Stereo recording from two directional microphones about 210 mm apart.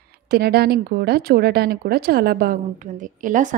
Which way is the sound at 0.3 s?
50° right (ahead or behind).